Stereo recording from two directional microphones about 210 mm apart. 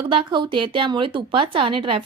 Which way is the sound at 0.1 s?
25° right (ahead or behind).